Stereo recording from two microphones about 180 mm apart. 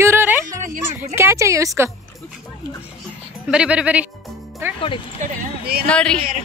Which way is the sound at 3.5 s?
5° right (ahead or behind).